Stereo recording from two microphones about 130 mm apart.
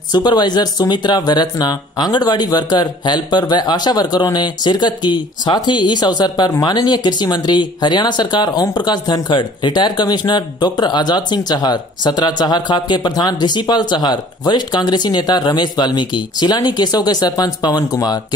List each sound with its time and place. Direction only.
0.1 s speech: 35° left (ahead or behind)